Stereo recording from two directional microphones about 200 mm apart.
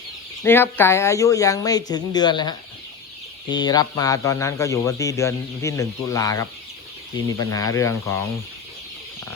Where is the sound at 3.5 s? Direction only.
20° left (ahead or behind).